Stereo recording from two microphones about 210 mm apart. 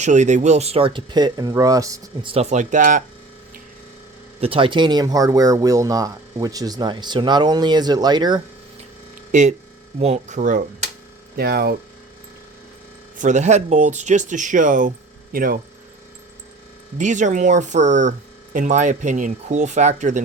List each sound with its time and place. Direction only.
0.0 s speech: 35° right (ahead or behind); by 2.3 s 15° right (ahead or behind)
2.3 s speech: 30° right (ahead or behind)
4.4 s speech: 25° right (ahead or behind)
9.3 s speech: 35° right (ahead or behind)
11.3 s speech: 45° right (ahead or behind)
13.1 s speech: 35° right (ahead or behind)
17.0 s speech: 35° right (ahead or behind)